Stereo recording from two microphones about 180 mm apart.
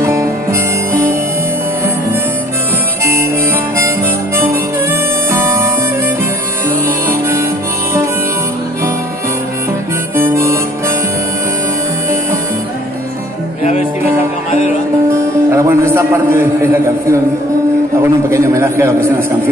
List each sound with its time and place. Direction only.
0.0 s music: 15° right (ahead or behind)
5.3 s music: 15° right (ahead or behind)
7.1 s harmonica: 15° right (ahead or behind)
10.1 s harmonica: 15° right (ahead or behind)
15.0 s music: 15° right (ahead or behind)
18.0 s a man's voice: 15° right (ahead or behind)